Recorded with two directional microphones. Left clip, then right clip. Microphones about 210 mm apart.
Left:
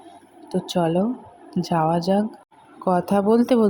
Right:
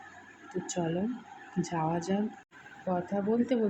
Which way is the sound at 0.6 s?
25° left (ahead or behind).